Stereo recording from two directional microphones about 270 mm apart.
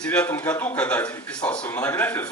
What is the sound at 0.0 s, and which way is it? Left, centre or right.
A man's voice, centre.